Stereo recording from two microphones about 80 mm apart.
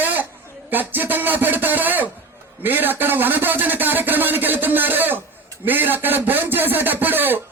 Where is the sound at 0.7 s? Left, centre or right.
Right.